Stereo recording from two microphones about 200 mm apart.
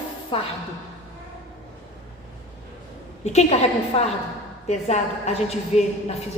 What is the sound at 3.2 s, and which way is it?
A woman's voice, 35° left (ahead or behind).